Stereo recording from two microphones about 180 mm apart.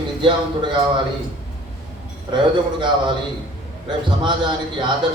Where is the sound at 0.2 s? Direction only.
25° right (ahead or behind).